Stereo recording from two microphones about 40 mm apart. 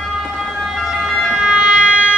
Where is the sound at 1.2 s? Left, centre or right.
Centre; by 2.2 s right.